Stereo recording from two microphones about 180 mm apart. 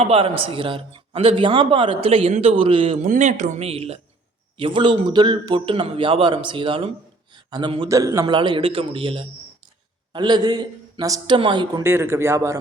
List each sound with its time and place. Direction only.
0.0 s a man's voice: 30° right (ahead or behind)
3.1 s a man's voice: 45° right (ahead or behind); by 8.3 s 15° right (ahead or behind)
8.3 s a man's voice: 30° right (ahead or behind)
11.8 s a man's voice: 15° right (ahead or behind)